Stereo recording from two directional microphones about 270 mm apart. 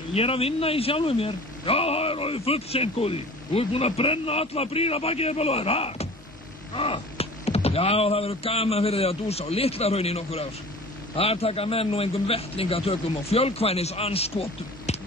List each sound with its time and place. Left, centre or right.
0.1 s speech: left